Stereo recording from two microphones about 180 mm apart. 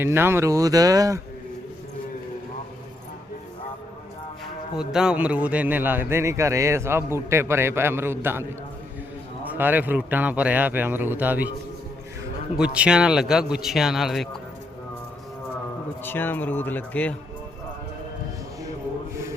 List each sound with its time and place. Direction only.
0.0 s speech: 15° right (ahead or behind)
4.4 s speech: 5° right (ahead or behind)
12.5 s a man's voice: 5° right (ahead or behind)
16.0 s speech: 10° left (ahead or behind)